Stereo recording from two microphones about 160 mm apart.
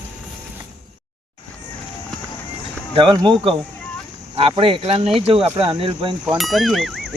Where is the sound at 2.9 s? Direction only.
30° right (ahead or behind).